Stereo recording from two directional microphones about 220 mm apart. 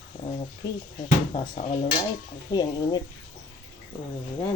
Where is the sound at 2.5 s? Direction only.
20° left (ahead or behind).